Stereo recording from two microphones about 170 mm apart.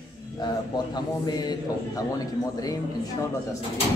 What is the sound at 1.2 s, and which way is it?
Speech, 25° left (ahead or behind).